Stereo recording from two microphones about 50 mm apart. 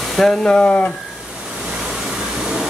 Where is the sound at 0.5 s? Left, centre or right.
Left.